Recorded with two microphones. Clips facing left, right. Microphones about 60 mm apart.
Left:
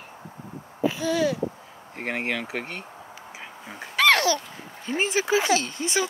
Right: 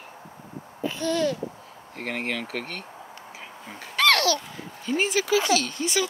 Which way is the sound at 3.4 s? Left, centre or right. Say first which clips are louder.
Left 3 dB; centre.